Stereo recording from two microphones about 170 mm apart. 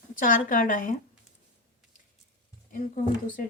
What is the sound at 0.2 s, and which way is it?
Speech, 55° left (ahead or behind).